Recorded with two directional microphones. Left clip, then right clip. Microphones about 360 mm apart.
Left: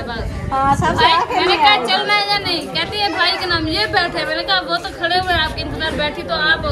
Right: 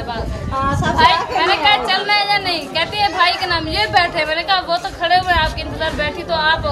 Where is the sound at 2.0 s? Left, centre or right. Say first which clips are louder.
Even; right.